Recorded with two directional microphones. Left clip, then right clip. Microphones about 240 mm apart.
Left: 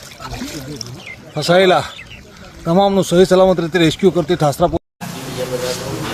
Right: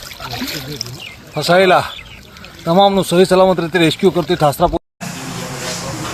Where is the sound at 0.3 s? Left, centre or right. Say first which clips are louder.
Right 4 dB; right.